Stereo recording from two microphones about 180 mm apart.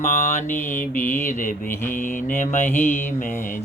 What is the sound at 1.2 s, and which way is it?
Mantra, 45° left (ahead or behind).